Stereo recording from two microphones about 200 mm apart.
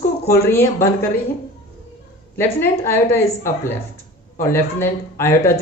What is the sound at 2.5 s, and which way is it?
Speech, 10° left (ahead or behind).